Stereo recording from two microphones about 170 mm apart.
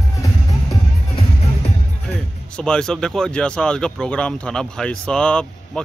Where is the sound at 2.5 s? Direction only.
5° left (ahead or behind).